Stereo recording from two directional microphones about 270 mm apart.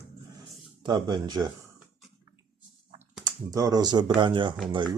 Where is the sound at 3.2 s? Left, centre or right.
Centre.